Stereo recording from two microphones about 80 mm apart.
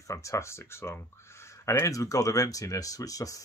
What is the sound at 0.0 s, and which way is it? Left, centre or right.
Speech, left.